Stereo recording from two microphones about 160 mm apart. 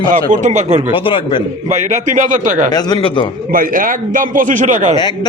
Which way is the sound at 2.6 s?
25° left (ahead or behind).